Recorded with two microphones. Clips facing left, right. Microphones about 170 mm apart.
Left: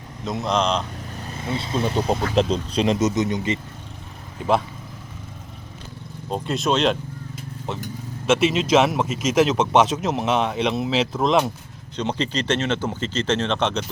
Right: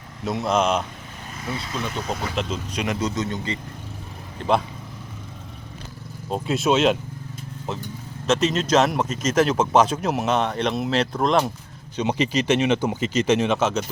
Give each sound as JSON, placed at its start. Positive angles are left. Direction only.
{"t": 0.3, "sound": "speech", "side_deg": -5}
{"t": 1.4, "sound": "speech", "side_deg": 25}
{"t": 4.4, "sound": "speech", "side_deg": 0}
{"t": 6.3, "sound": "a man's voice", "side_deg": -5}
{"t": 11.9, "sound": "speech", "side_deg": -10}